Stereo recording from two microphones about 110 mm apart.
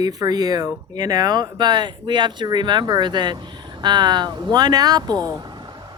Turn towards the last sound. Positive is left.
turn(degrees=-35)  # may be behind; listen again after turning